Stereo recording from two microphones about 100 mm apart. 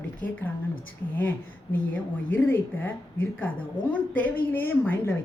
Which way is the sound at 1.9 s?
20° left (ahead or behind).